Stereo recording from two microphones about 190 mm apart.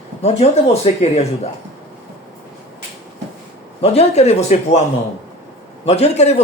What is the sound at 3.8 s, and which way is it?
Speech, 35° left (ahead or behind).